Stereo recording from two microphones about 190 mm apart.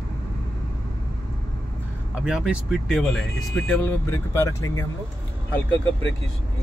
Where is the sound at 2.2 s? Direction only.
5° right (ahead or behind); by 4.8 s 15° left (ahead or behind).